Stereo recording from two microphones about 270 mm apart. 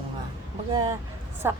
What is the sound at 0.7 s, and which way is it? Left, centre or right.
Speech, centre.